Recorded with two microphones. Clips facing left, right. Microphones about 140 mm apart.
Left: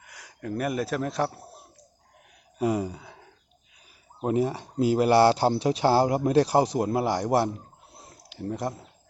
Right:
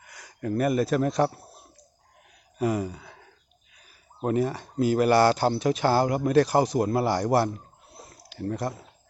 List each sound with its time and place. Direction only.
0.0 s speech: 5° left (ahead or behind)
2.6 s a sound: 20° left (ahead or behind)
4.2 s speech: 15° left (ahead or behind)
6.8 s speech: 15° left (ahead or behind)